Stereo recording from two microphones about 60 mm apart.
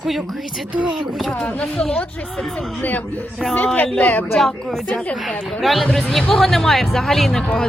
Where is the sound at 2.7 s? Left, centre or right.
Left.